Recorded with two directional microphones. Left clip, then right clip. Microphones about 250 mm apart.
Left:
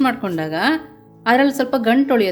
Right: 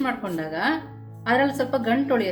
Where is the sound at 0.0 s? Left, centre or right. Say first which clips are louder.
Left 7 dB; left.